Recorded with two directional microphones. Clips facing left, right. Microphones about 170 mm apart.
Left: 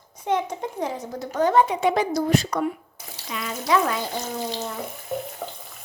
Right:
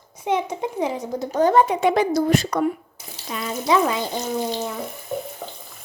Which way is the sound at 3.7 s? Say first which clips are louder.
Right 2 dB; 20° right (ahead or behind).